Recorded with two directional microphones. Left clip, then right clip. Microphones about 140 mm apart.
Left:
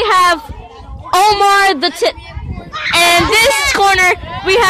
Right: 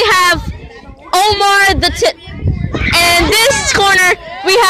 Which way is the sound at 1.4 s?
35° left (ahead or behind).